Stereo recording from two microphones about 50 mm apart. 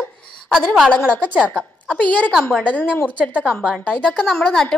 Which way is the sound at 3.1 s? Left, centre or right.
Right.